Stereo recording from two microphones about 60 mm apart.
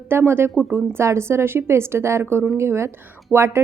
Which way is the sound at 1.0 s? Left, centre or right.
Right.